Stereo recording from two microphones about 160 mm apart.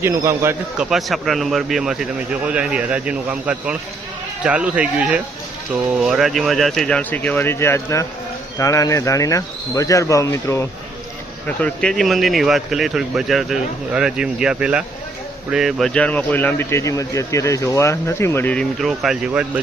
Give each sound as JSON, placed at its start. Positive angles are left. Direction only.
{"t": 0.0, "sound": "speech", "side_deg": -15}
{"t": 0.8, "sound": "a man's voice", "side_deg": 0}
{"t": 11.4, "sound": "a man's voice", "side_deg": 5}